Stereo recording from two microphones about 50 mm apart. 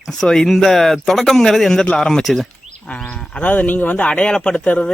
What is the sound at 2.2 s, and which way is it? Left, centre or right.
Speech, centre.